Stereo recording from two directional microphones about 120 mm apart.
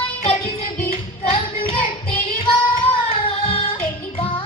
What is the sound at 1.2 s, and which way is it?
Music, 55° left (ahead or behind).